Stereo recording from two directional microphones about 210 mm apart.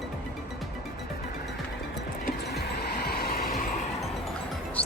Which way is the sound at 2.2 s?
50° left (ahead or behind).